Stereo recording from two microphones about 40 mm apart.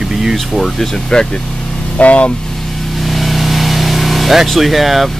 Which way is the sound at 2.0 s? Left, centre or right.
Left.